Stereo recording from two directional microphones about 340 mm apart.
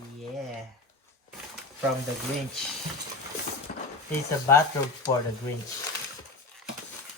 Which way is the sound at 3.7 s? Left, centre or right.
Left.